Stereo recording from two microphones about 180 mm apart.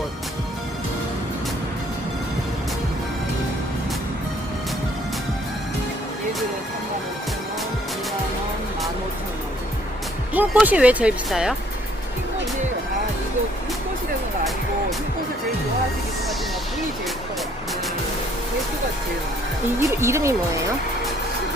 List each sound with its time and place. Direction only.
10.3 s speech: 10° right (ahead or behind)
19.8 s speech: 15° right (ahead or behind)